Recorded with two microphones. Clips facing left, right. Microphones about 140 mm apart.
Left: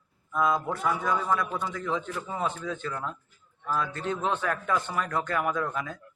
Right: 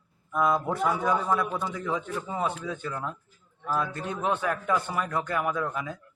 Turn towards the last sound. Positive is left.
turn(degrees=-5)  # may be behind; listen again after turning